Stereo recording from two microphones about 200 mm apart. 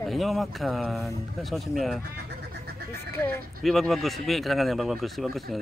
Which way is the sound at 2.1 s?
55° right (ahead or behind).